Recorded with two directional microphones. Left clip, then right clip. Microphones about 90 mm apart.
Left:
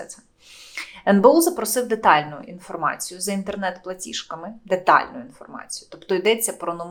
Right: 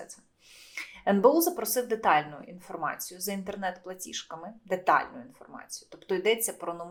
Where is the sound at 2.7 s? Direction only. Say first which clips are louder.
Left 7 dB; 20° left (ahead or behind).